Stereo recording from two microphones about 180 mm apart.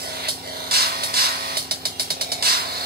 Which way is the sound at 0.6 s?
60° right (ahead or behind).